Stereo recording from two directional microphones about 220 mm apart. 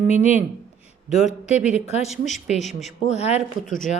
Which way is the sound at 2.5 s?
30° left (ahead or behind).